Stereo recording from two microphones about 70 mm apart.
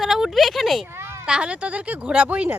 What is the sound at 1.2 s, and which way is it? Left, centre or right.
Speech, centre.